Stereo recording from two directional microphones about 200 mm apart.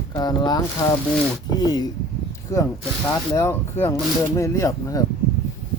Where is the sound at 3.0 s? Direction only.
10° left (ahead or behind).